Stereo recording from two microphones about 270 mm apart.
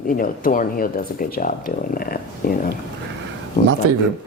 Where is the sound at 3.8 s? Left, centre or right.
Right.